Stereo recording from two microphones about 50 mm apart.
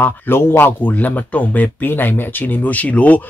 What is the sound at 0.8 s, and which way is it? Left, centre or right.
Speech, left.